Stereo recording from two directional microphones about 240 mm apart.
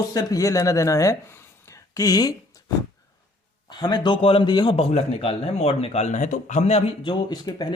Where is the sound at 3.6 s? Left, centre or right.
Centre.